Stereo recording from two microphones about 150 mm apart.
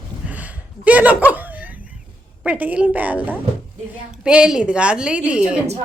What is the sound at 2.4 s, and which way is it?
A woman's voice, 10° right (ahead or behind).